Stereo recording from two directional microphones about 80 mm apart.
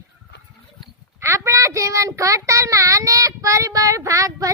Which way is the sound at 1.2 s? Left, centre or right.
Right.